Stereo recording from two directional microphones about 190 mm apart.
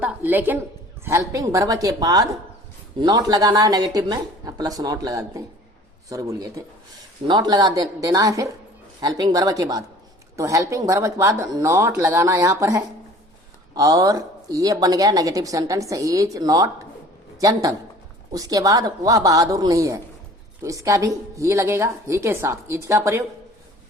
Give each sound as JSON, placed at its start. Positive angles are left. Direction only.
{"t": 0.0, "sound": "a woman's voice", "side_deg": -10}